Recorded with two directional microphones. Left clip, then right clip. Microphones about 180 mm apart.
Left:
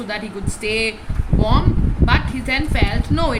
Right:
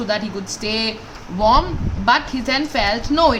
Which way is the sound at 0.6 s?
50° right (ahead or behind).